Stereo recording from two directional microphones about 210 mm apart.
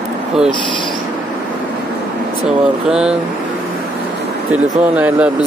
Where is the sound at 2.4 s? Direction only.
5° right (ahead or behind).